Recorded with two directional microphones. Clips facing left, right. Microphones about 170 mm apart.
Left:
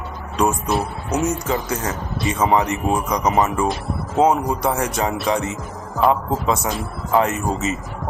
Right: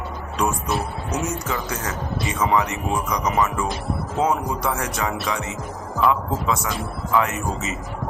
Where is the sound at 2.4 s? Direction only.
30° left (ahead or behind).